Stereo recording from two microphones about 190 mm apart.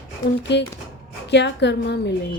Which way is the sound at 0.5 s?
65° left (ahead or behind).